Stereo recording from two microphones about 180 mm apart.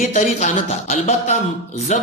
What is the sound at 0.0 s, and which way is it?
A man's voice, 40° left (ahead or behind).